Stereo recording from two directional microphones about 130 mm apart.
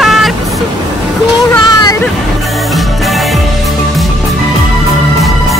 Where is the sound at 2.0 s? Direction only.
Centre (ahead or behind).